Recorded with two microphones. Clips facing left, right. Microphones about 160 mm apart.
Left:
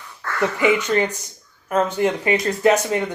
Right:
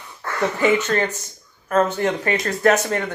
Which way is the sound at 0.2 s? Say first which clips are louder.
Even; 20° right (ahead or behind).